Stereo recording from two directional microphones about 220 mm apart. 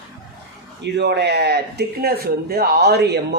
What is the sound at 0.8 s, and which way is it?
Speech, 50° right (ahead or behind).